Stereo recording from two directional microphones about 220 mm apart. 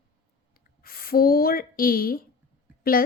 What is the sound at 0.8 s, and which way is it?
A woman's voice, 40° left (ahead or behind).